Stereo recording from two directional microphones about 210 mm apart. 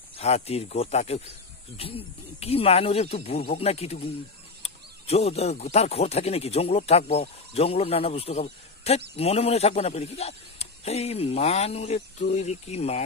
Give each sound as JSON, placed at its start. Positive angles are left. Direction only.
{"t": 0.2, "sound": "speech", "side_deg": 30}